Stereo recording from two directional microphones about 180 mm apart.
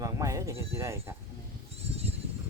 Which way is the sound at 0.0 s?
15° right (ahead or behind).